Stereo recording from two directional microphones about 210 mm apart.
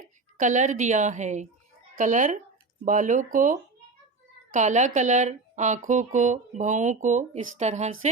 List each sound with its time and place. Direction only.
0.3 s speech: 35° right (ahead or behind)